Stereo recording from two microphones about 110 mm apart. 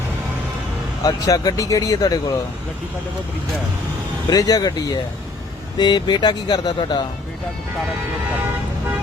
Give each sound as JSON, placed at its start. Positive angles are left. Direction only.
{"t": 1.0, "sound": "speech", "side_deg": 35}
{"t": 4.3, "sound": "speech", "side_deg": 35}